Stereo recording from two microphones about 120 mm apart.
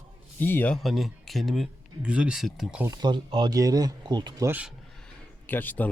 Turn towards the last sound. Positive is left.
turn(degrees=15)  # may be behind; listen again after turning